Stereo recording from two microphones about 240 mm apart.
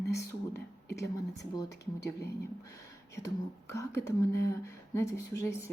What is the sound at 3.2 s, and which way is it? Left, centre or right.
Speech, centre.